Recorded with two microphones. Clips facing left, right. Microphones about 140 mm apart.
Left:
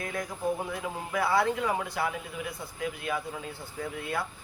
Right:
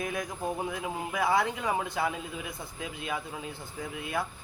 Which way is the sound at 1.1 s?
20° right (ahead or behind).